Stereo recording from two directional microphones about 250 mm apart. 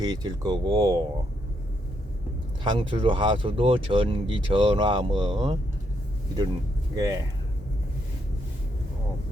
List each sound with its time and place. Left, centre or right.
0.0 s speech: centre
2.6 s speech: centre
6.9 s speech: centre